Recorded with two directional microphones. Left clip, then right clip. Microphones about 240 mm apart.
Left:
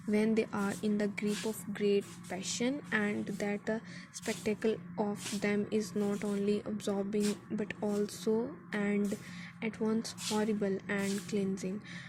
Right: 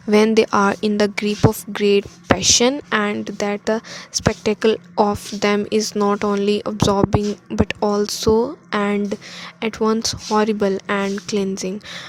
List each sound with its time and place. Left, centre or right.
0.1 s a woman's voice: right